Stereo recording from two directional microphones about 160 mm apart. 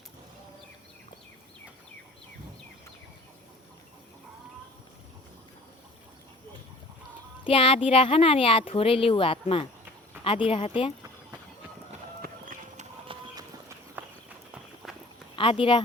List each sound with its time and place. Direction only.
7.4 s speech: 35° left (ahead or behind)
12.2 s a sound: 55° right (ahead or behind)
13.1 s clip-clop: 25° right (ahead or behind)
14.0 s clip-clop: 10° right (ahead or behind)
14.8 s walk: centre (ahead or behind)
15.4 s speech: 35° left (ahead or behind)